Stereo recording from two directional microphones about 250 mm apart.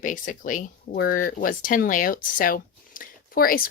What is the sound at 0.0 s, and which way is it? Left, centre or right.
Speech, left.